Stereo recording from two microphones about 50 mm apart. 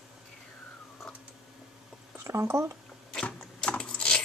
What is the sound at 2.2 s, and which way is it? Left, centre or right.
Speech, right.